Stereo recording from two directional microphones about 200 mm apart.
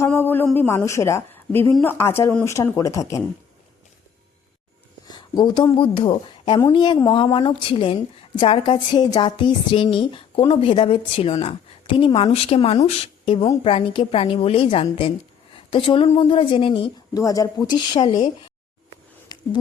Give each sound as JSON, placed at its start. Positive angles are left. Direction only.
{"t": 0.0, "sound": "a woman's voice", "side_deg": 10}
{"t": 5.0, "sound": "a woman's voice", "side_deg": 20}
{"t": 19.3, "sound": "a sound", "side_deg": 20}